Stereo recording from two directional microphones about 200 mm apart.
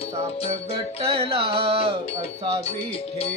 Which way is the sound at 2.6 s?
30° left (ahead or behind).